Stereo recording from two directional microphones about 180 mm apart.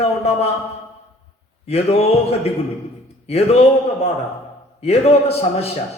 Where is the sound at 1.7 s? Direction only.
35° left (ahead or behind).